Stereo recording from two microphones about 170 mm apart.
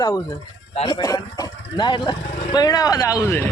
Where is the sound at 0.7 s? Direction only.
30° left (ahead or behind); by 3.5 s 10° left (ahead or behind).